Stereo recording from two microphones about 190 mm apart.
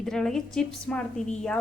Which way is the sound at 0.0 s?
Centre (ahead or behind).